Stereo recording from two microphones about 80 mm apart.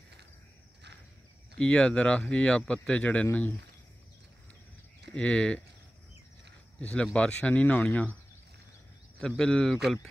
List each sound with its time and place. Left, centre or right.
1.6 s speech: centre
5.1 s speech: centre
6.8 s speech: centre
9.4 s speech: centre